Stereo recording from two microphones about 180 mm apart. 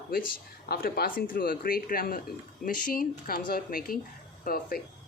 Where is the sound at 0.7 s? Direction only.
55° left (ahead or behind).